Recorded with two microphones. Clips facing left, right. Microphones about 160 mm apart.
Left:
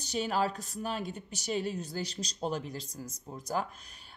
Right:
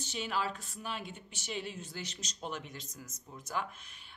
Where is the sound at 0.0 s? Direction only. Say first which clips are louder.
Left 5 dB; 40° left (ahead or behind).